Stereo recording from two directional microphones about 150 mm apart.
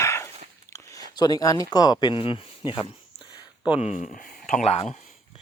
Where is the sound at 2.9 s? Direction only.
35° left (ahead or behind).